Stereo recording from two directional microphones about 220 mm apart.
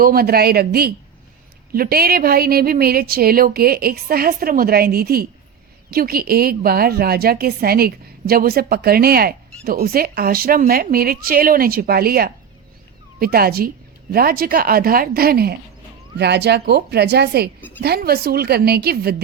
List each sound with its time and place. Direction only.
0.0 s a woman's voice: 45° right (ahead or behind)